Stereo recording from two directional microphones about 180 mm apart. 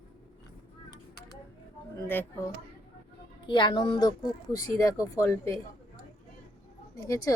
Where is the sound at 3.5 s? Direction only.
25° left (ahead or behind).